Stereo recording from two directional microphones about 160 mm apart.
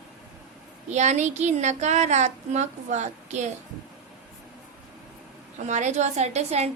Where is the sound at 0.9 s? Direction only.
45° right (ahead or behind).